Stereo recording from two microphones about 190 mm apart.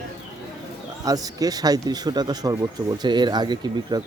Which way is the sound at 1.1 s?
20° right (ahead or behind).